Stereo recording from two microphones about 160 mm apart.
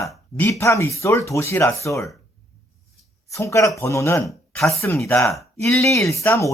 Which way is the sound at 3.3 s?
20° left (ahead or behind).